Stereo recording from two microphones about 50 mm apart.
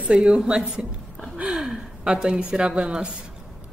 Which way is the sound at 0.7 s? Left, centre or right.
Centre.